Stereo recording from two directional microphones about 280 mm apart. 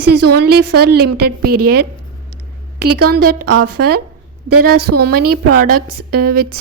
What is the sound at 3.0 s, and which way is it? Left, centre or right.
A woman's voice, right.